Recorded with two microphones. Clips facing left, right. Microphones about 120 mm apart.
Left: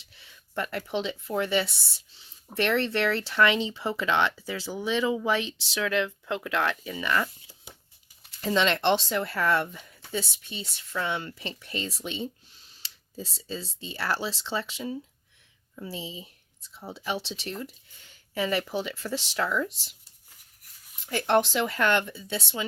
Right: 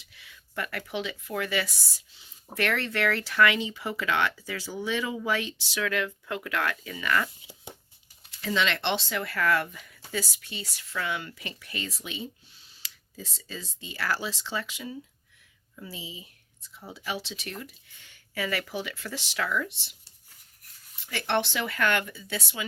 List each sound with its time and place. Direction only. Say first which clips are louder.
0.0 s speech: right 1 dB; 30° left (ahead or behind)
8.3 s speech: left 3 dB; 35° left (ahead or behind)
21.1 s speech: left 4 dB; 40° left (ahead or behind)